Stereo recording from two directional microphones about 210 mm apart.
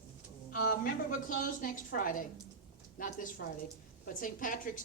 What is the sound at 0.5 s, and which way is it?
A woman's voice, 45° left (ahead or behind).